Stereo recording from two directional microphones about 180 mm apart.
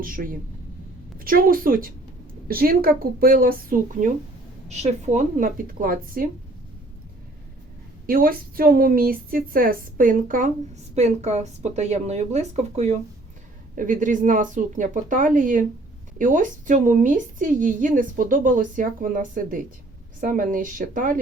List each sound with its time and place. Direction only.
0.0 s a woman's voice: 50° right (ahead or behind)
4.7 s a woman's voice: 40° right (ahead or behind)
8.0 s a woman's voice: 50° right (ahead or behind)